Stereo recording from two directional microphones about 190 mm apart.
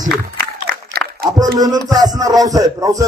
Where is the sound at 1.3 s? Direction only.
20° right (ahead or behind).